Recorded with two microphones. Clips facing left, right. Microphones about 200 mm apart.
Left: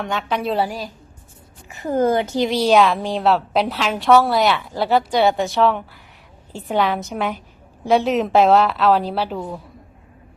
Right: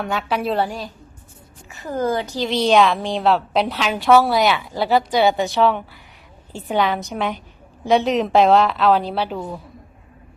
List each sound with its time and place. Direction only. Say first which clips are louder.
0.0 s a woman's voice: even; 5° right (ahead or behind)
1.7 s a woman's voice: left 4 dB; 20° left (ahead or behind)
2.5 s a woman's voice: right 1 dB; 5° left (ahead or behind)